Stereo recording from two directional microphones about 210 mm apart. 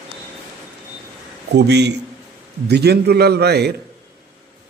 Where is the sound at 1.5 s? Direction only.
55° right (ahead or behind).